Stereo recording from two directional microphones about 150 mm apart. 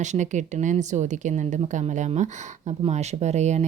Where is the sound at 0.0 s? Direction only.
50° right (ahead or behind).